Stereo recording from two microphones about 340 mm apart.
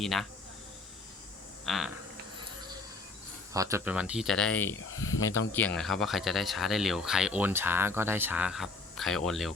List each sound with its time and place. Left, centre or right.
0.0 s speech: centre
1.6 s speech: centre
3.5 s speech: centre
4.9 s speech: left
5.5 s speech: centre